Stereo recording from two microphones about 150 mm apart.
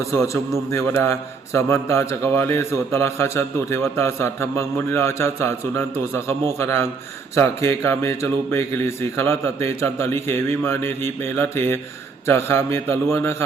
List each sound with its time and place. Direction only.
0.0 s a man's voice: 20° left (ahead or behind)